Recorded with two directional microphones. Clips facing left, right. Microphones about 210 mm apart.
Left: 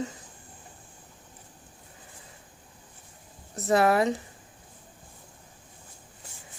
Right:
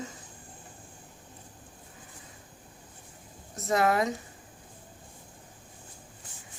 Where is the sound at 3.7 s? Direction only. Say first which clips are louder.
Left 4 dB; 30° left (ahead or behind).